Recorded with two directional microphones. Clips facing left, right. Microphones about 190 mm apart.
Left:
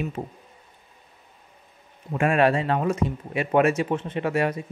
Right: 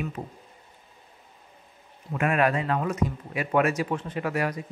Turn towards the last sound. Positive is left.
turn(degrees=25)  # may be behind; listen again after turning